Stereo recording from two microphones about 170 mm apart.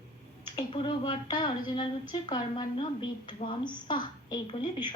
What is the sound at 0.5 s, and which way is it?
A woman's voice, 25° left (ahead or behind).